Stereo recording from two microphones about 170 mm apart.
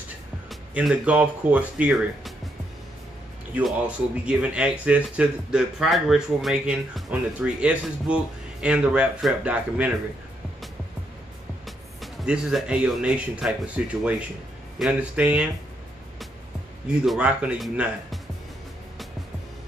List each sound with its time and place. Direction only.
0.5 s speech: 5° right (ahead or behind)
3.5 s speech: 5° right (ahead or behind)
11.6 s speech: centre (ahead or behind)
17.0 s speech: 5° right (ahead or behind)